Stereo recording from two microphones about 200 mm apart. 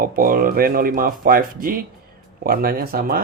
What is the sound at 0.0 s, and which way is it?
Speech, 45° right (ahead or behind).